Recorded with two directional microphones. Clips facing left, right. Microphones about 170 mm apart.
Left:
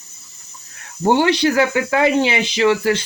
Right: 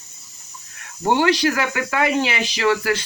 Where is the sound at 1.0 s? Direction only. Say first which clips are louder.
Left 3 dB; 30° left (ahead or behind).